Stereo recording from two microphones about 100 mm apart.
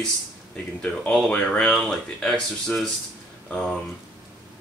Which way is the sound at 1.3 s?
10° left (ahead or behind).